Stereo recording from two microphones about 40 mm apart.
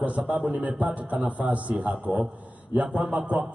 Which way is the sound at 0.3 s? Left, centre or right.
Right.